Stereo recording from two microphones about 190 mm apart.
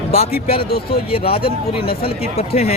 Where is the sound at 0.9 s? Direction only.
30° left (ahead or behind).